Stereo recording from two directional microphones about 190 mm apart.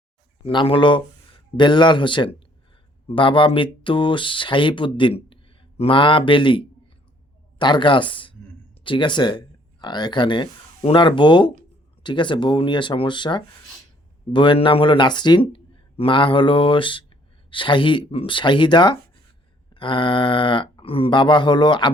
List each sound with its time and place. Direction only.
0.4 s speech: 30° left (ahead or behind)